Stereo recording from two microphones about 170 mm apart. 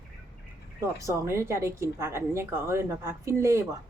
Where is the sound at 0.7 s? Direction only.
20° right (ahead or behind).